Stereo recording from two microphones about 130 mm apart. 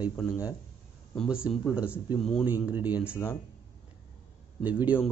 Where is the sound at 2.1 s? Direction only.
5° left (ahead or behind).